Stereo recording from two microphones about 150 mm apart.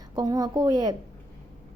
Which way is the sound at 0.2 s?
25° right (ahead or behind).